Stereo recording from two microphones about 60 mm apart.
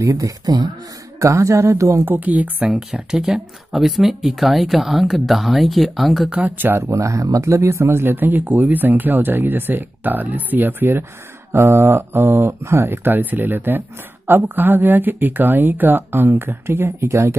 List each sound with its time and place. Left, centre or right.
0.0 s speech: right
1.2 s speech: right
2.0 s speech: right
2.7 s speech: centre
6.3 s speech: right
6.9 s speech: right
11.5 s speech: right